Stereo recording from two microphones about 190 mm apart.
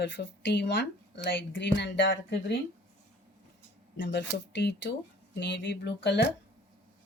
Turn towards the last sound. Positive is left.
turn(degrees=65)  # may be behind; listen again after turning